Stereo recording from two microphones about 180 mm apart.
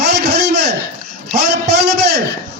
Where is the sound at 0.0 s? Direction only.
70° right (ahead or behind).